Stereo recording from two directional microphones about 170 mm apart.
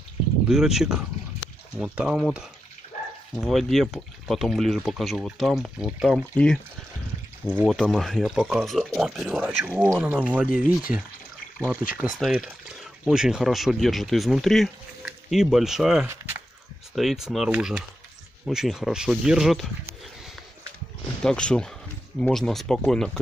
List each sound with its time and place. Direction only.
0.5 s speech: 5° right (ahead or behind)
7.6 s speech: centre (ahead or behind)
16.1 s a sound: 15° right (ahead or behind)
16.9 s speech: centre (ahead or behind)
21.2 s speech: 5° left (ahead or behind)